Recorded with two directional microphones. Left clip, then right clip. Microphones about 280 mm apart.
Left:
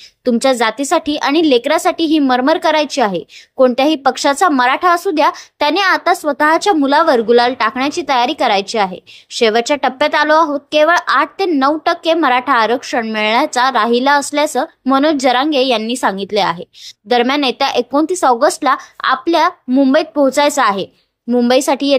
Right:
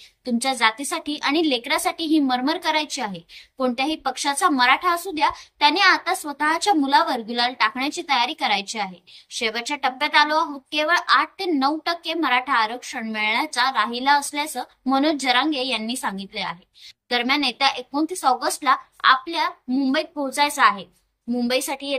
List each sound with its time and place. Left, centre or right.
0.2 s speech: centre